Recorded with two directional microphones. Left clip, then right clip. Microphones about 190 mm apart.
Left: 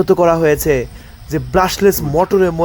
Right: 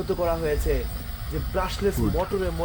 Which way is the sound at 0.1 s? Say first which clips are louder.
Left 12 dB; 45° left (ahead or behind).